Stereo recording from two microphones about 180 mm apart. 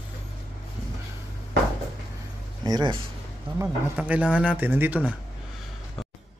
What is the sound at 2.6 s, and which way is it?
Speech, 25° right (ahead or behind).